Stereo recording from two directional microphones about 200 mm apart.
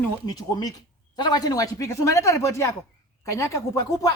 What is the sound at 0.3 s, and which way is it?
A woman's voice, 20° left (ahead or behind).